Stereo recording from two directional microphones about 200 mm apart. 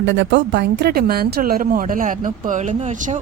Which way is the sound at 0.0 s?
65° right (ahead or behind).